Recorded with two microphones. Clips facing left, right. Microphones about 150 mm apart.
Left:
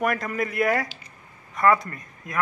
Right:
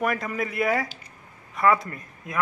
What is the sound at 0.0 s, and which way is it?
A man's voice, centre (ahead or behind).